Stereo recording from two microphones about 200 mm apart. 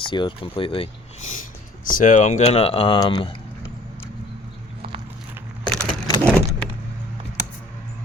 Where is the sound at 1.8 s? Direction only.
40° left (ahead or behind); by 3.3 s 20° left (ahead or behind).